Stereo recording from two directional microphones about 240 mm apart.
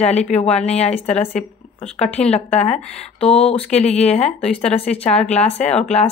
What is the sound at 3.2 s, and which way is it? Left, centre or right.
Speech, left.